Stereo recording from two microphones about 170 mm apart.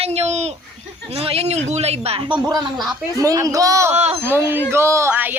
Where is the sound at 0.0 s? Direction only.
40° right (ahead or behind).